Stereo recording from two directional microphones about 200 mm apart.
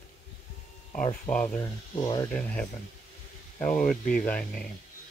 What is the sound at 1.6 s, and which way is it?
Speech, 20° left (ahead or behind).